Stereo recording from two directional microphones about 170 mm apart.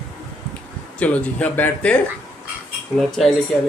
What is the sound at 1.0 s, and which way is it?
A woman's voice, 10° left (ahead or behind).